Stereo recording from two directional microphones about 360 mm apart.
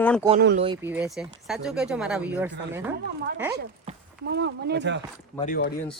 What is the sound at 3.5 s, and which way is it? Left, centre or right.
Speech, right.